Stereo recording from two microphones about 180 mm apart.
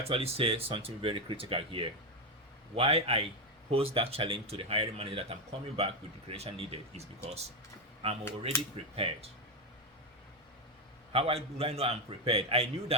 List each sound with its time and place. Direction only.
0.0 s speech: 35° right (ahead or behind)
11.1 s speech: 30° right (ahead or behind)